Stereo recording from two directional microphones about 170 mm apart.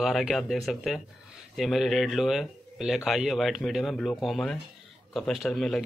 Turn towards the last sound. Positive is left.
turn(degrees=0)  # may be behind; listen again after turning